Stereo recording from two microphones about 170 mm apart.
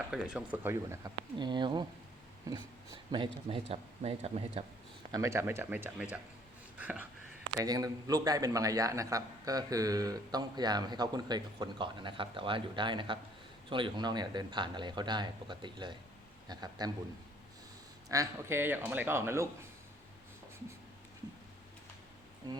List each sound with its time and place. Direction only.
0.1 s speech: 5° right (ahead or behind); by 3.2 s 25° right (ahead or behind)
3.5 s speech: 35° right (ahead or behind)
5.1 s speech: 15° right (ahead or behind)
6.7 s a sound: 10° right (ahead or behind)
7.6 s a man's voice: 20° right (ahead or behind)
18.1 s speech: 15° right (ahead or behind)